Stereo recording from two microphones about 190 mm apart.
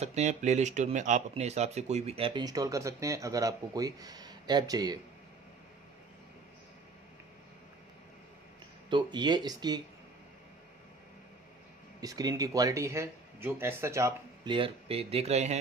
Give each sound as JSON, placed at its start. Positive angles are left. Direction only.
{"t": 0.0, "sound": "speech", "side_deg": -35}
{"t": 8.9, "sound": "speech", "side_deg": -25}
{"t": 12.0, "sound": "speech", "side_deg": -20}